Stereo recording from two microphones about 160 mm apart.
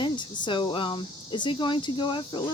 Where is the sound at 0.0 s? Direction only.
30° left (ahead or behind).